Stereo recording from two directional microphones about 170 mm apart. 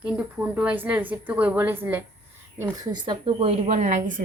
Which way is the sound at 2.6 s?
25° right (ahead or behind).